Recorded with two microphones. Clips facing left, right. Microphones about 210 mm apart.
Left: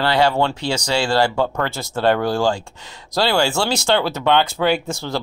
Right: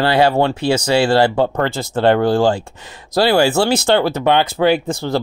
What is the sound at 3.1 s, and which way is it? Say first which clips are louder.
Speech: right 5 dB; 55° right (ahead or behind).